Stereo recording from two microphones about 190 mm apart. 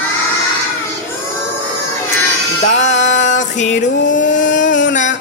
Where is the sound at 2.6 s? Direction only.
40° left (ahead or behind).